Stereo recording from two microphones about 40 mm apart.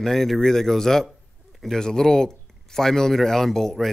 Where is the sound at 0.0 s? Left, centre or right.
Centre.